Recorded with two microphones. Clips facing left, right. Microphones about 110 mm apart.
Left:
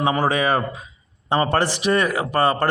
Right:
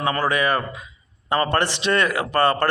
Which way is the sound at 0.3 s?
30° left (ahead or behind).